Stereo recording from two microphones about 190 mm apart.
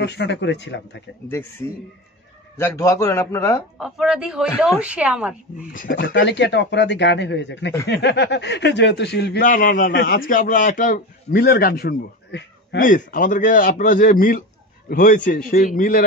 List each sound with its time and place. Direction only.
0.0 s speech: 65° left (ahead or behind)
1.3 s speech: 10° left (ahead or behind)
3.7 s speech: centre (ahead or behind)
5.7 s speech: 45° left (ahead or behind); by 9.4 s 65° left (ahead or behind)
9.4 s a man's voice: 45° left (ahead or behind); by 12.8 s 65° left (ahead or behind)
12.8 s a man's voice: 45° left (ahead or behind)